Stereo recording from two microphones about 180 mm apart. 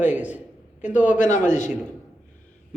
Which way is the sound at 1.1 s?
45° left (ahead or behind).